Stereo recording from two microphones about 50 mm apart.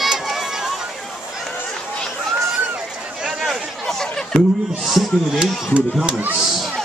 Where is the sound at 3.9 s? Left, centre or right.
Centre.